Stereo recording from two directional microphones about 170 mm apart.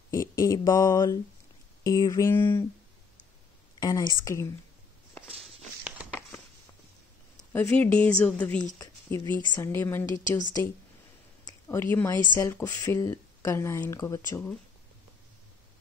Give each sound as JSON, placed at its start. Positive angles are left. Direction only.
{"t": 0.1, "sound": "speech", "side_deg": 20}
{"t": 3.8, "sound": "speech", "side_deg": 25}
{"t": 5.4, "sound": "a sound", "side_deg": -5}
{"t": 7.5, "sound": "speech", "side_deg": 10}
{"t": 8.7, "sound": "speech", "side_deg": 20}
{"t": 11.4, "sound": "speech", "side_deg": 15}